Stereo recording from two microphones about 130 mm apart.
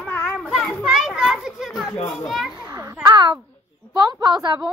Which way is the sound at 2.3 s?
Centre (ahead or behind).